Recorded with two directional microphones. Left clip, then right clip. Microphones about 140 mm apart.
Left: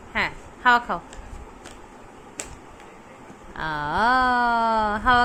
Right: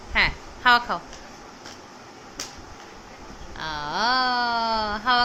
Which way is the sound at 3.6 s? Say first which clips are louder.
Left 3 dB; 55° left (ahead or behind).